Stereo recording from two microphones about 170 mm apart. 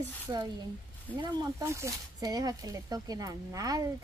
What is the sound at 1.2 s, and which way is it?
Speech, 25° right (ahead or behind).